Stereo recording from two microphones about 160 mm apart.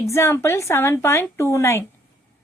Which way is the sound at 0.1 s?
15° left (ahead or behind).